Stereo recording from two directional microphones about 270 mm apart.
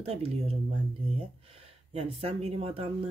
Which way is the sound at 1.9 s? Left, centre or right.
Right.